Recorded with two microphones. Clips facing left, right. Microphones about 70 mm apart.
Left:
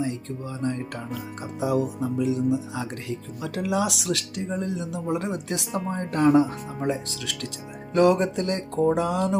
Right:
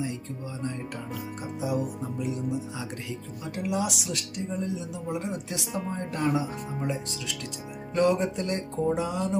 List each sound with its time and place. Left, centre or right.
1.6 s speech: left
9.0 s music: left